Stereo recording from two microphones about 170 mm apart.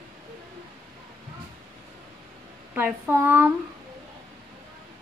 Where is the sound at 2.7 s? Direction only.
10° right (ahead or behind).